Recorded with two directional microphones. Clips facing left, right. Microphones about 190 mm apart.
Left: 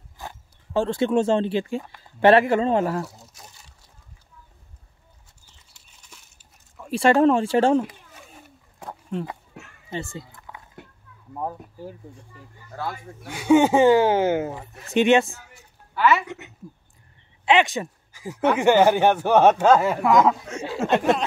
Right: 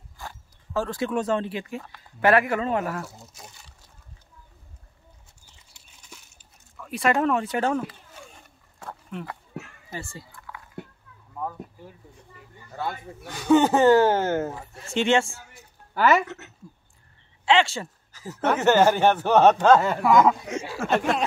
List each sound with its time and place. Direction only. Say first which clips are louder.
0.2 s speech: left 2 dB; 25° left (ahead or behind)
3.1 s a sound: right 2 dB; centre (ahead or behind)
6.8 s speech: left 6 dB; 30° left (ahead or behind)
9.1 s speech: left 7 dB; 30° left (ahead or behind)
9.8 s dog: left 5 dB; 20° left (ahead or behind)
11.3 s speech: left 2 dB; 30° left (ahead or behind)
12.7 s speech: even; 5° left (ahead or behind)
15.9 s speech: even; 40° right (ahead or behind)
16.3 s speech: left 3 dB; 10° left (ahead or behind)
20.1 s speech: even; 5° right (ahead or behind)
20.6 s speech: left 4 dB; 20° left (ahead or behind)